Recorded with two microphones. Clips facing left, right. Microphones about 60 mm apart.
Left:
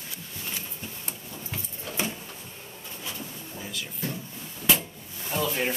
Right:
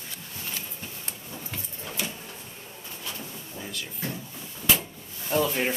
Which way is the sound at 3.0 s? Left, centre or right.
Centre.